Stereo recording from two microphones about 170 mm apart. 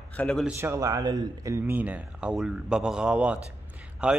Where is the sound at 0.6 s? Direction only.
15° right (ahead or behind).